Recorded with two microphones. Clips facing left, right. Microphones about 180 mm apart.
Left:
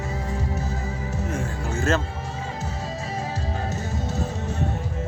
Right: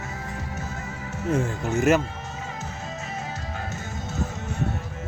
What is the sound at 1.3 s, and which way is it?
Music, 20° right (ahead or behind).